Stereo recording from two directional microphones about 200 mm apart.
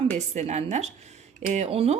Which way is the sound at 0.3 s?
35° right (ahead or behind).